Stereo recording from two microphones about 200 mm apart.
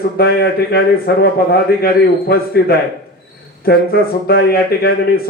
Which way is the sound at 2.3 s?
50° left (ahead or behind).